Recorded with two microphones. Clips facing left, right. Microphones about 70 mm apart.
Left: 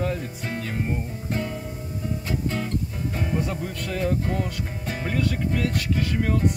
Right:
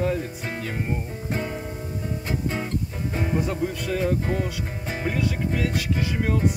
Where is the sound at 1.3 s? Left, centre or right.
Right.